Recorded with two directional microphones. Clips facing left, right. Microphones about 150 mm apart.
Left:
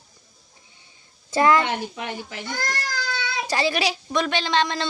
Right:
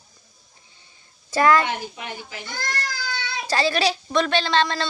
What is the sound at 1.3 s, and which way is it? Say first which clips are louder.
Speech: even; 20° left (ahead or behind).